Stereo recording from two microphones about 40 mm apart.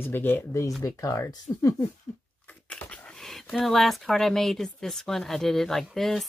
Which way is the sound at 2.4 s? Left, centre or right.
Left.